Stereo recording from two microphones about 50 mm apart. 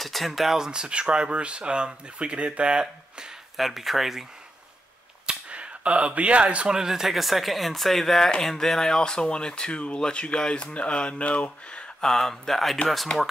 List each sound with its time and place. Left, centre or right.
0.0 s speech: centre
0.7 s speech: centre
3.5 s speech: centre
5.2 s a sound: right
6.8 s speech: centre; by 11.8 s left
12.0 s speech: centre